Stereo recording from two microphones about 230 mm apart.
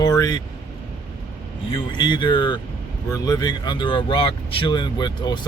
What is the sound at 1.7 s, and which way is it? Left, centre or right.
Speech, centre.